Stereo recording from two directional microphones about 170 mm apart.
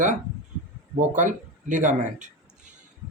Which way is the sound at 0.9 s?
45° right (ahead or behind).